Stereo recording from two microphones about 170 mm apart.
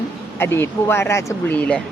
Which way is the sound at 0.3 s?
15° left (ahead or behind).